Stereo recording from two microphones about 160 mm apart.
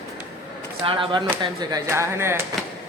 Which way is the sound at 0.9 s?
35° right (ahead or behind).